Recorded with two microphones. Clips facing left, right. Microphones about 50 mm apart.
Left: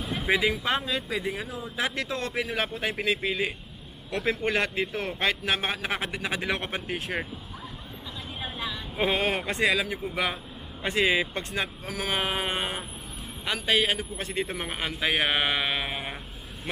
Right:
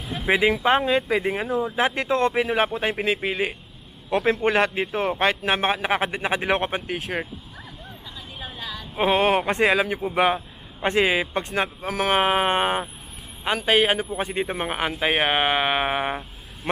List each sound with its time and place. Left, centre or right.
0.0 s a sound: centre
0.3 s speech: right
6.9 s speech: centre
8.4 s a sound: centre
8.9 s speech: right
10.1 s a sound: right
10.9 s speech: centre
12.5 s speech: centre
15.0 s speech: centre